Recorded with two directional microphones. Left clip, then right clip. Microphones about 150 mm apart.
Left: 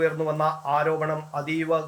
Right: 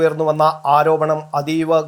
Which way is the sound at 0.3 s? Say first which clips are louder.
Right 10 dB; 25° right (ahead or behind).